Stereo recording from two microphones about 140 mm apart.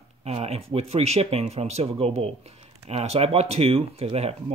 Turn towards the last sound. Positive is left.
turn(degrees=-45)  # may be behind; listen again after turning